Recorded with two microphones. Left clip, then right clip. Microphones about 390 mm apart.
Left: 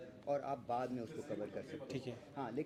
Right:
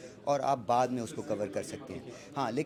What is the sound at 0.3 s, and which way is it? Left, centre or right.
Speech, right.